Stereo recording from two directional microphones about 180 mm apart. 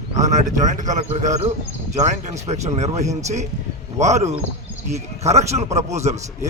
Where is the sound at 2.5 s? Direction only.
40° right (ahead or behind).